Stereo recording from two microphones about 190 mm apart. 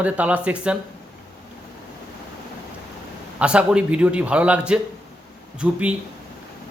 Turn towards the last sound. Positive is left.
turn(degrees=-5)  # may be behind; listen again after turning